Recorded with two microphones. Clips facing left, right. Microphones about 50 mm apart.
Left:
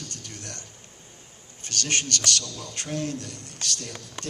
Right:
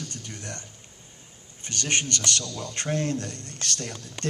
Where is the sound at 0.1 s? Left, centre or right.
Right.